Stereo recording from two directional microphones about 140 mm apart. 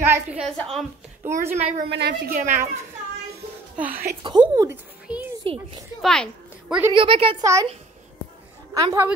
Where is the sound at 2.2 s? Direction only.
75° right (ahead or behind).